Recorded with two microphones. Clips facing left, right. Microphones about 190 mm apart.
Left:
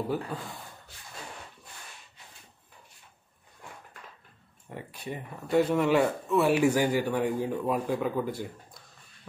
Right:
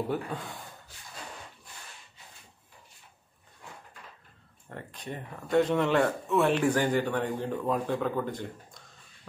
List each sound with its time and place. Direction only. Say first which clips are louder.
0.1 s speech: even; centre (ahead or behind)
4.6 s speech: left 2 dB; 10° left (ahead or behind)